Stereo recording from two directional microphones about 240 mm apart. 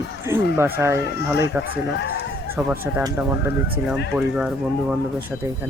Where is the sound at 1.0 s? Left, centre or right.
Left.